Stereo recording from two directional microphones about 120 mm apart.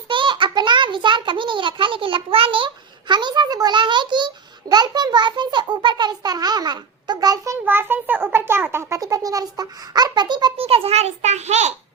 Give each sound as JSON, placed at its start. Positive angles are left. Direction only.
{"t": 0.1, "sound": "a sound", "side_deg": -45}
{"t": 7.6, "sound": "a child's voice", "side_deg": -20}
{"t": 10.6, "sound": "a child's voice", "side_deg": -55}